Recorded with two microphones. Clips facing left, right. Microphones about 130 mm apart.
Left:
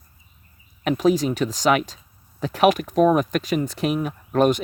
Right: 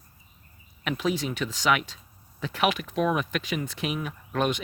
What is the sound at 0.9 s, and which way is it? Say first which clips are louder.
Speech: left 9 dB; 40° left (ahead or behind).